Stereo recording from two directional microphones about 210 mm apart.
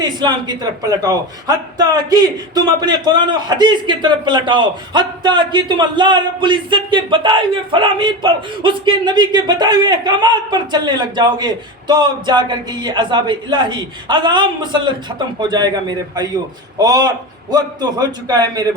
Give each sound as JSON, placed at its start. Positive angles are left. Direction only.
{"t": 0.0, "sound": "a man's voice", "side_deg": -20}